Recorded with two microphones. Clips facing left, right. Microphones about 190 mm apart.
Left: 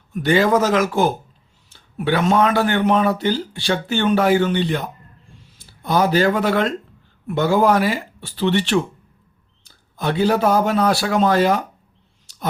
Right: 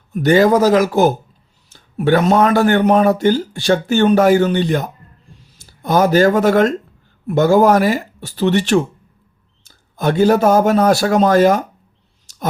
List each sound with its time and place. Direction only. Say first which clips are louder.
0.1 s a man's voice: right 4 dB; 40° right (ahead or behind)
12.3 s clicking: right 6 dB; 45° right (ahead or behind)